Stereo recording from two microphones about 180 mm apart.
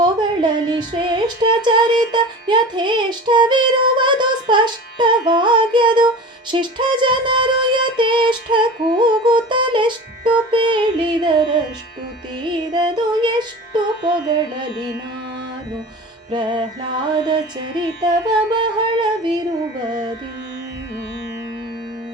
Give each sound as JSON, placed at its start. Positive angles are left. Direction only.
{"t": 0.0, "sound": "a sound", "side_deg": -25}
{"t": 2.1, "sound": "music", "side_deg": -25}
{"t": 16.3, "sound": "music", "side_deg": -25}